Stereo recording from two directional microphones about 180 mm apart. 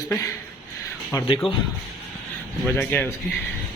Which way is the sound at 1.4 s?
30° left (ahead or behind).